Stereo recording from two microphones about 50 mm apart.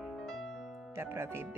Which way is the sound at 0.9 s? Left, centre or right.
Right.